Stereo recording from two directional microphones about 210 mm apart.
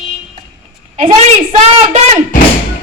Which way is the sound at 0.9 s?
35° right (ahead or behind).